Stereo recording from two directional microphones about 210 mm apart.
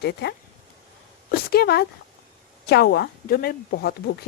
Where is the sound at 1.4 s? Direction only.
50° left (ahead or behind).